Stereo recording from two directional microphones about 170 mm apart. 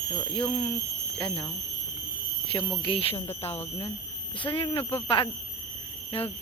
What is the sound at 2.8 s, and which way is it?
Speech, 30° left (ahead or behind).